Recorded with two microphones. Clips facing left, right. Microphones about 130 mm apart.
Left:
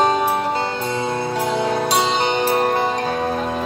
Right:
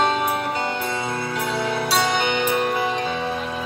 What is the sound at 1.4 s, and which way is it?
Music, 40° left (ahead or behind).